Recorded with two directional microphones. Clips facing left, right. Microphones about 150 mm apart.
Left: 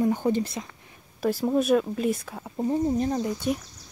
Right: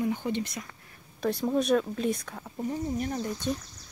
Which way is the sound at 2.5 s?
30° left (ahead or behind).